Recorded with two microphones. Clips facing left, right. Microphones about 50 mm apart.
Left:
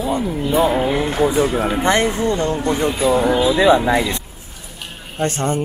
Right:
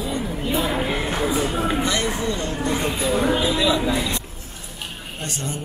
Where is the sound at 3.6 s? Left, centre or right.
Left.